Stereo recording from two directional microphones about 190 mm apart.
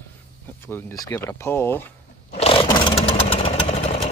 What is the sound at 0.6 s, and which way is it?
Speech, 10° left (ahead or behind).